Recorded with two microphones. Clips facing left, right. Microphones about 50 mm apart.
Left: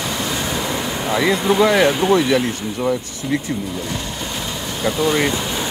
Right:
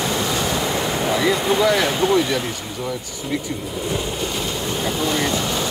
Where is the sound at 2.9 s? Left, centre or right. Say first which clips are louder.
Left 5 dB; left.